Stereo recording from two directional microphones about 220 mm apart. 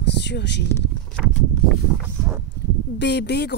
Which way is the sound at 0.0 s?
50° left (ahead or behind).